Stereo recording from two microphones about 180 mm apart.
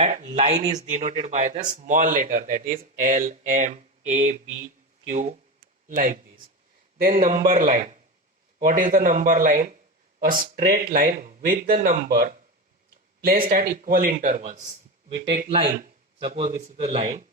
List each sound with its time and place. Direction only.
0.1 s speech: 40° right (ahead or behind)
13.2 s speech: 55° right (ahead or behind)
16.2 s a man's voice: 35° right (ahead or behind)